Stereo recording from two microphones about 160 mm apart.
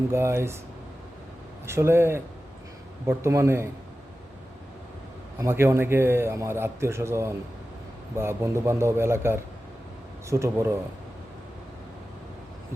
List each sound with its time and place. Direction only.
0.1 s a man's voice: 15° right (ahead or behind)
1.6 s a man's voice: 15° right (ahead or behind)
5.4 s a man's voice: 15° right (ahead or behind)